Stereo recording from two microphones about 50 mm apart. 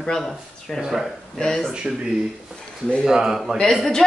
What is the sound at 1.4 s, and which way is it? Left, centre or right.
Speech, centre.